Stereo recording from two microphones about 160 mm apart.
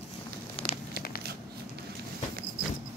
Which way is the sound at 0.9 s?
75° left (ahead or behind).